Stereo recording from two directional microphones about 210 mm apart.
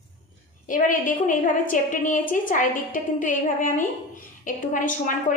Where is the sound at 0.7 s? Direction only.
40° left (ahead or behind).